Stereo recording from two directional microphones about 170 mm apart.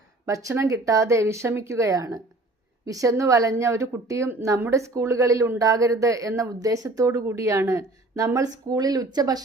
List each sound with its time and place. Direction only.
0.3 s a woman's voice: 20° right (ahead or behind)